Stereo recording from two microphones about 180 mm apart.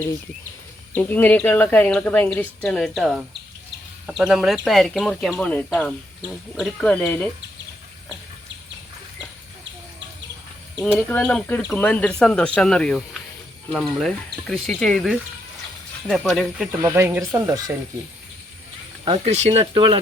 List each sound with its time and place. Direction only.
0.9 s speech: 10° left (ahead or behind)
6.8 s speech: 5° left (ahead or behind)
10.9 s speech: 10° left (ahead or behind)
16.8 s speech: 15° right (ahead or behind)
19.0 s speech: 35° right (ahead or behind)